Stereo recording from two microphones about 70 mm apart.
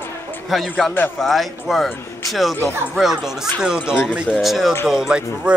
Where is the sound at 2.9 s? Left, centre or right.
Centre.